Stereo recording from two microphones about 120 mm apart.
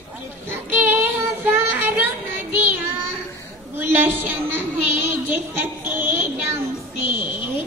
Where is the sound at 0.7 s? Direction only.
15° right (ahead or behind).